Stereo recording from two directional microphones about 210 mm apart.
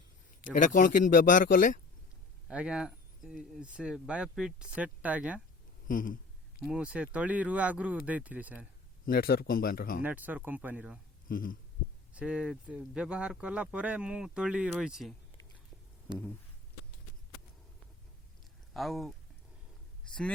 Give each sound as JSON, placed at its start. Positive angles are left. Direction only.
{"t": 0.6, "sound": "speech", "side_deg": 40}
{"t": 2.5, "sound": "speech", "side_deg": -5}
{"t": 5.9, "sound": "speech", "side_deg": 40}
{"t": 6.7, "sound": "speech", "side_deg": -5}
{"t": 9.0, "sound": "speech", "side_deg": 45}
{"t": 10.0, "sound": "speech", "side_deg": -10}
{"t": 11.3, "sound": "speech", "side_deg": 40}
{"t": 12.1, "sound": "speech", "side_deg": -5}
{"t": 18.7, "sound": "speech", "side_deg": 0}